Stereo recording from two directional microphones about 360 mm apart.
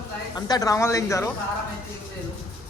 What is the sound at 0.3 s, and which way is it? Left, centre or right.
Speech, centre.